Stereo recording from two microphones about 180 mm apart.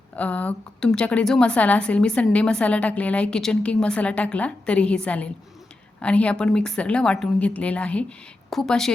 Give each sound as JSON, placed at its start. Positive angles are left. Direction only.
{"t": 0.2, "sound": "a woman's voice", "side_deg": 10}